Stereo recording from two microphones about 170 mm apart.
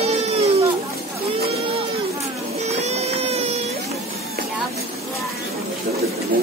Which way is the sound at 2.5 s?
40° right (ahead or behind).